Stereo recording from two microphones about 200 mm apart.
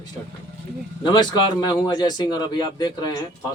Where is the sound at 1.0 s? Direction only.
20° left (ahead or behind).